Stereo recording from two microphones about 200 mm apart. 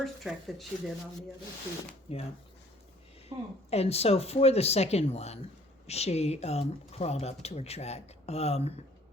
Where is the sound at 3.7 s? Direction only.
30° left (ahead or behind).